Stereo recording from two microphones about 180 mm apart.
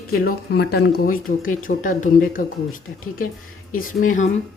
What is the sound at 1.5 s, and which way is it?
Speech, 45° left (ahead or behind).